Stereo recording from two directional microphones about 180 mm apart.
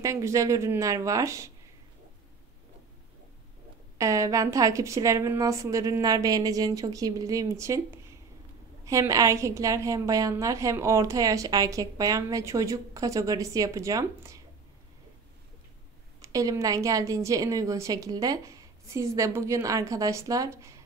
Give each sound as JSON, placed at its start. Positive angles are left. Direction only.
{"t": 0.0, "sound": "a woman's voice", "side_deg": -15}
{"t": 4.0, "sound": "a woman's voice", "side_deg": -15}
{"t": 8.8, "sound": "a woman's voice", "side_deg": -15}
{"t": 16.2, "sound": "a woman's voice", "side_deg": -20}